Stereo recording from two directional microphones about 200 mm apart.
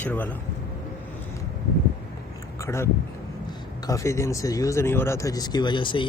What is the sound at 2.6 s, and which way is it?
Speech, 15° left (ahead or behind).